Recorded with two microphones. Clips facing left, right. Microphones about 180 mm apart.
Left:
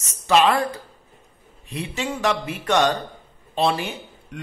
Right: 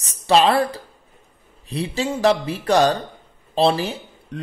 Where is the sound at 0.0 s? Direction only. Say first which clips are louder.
Right 2 dB; 35° right (ahead or behind).